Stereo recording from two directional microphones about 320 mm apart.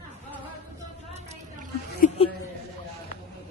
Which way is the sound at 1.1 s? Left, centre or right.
Right.